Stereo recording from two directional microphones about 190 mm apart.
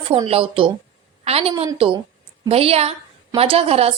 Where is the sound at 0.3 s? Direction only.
30° right (ahead or behind).